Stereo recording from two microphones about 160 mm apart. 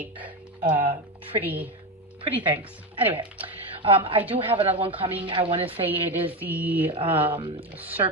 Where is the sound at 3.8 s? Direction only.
35° right (ahead or behind).